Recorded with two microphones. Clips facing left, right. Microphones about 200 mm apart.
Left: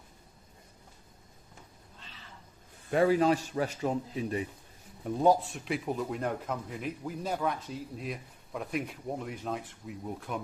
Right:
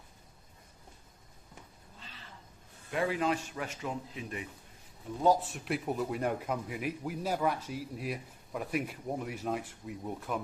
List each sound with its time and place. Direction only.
2.9 s a man's voice: 40° left (ahead or behind)
5.5 s speech: centre (ahead or behind)